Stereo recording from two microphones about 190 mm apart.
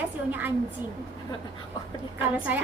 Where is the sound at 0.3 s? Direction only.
10° right (ahead or behind).